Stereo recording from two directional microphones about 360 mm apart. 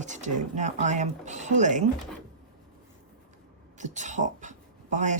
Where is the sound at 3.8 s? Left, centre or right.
Centre.